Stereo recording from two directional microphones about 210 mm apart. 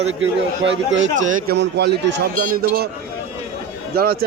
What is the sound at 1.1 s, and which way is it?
A man's voice, 50° right (ahead or behind).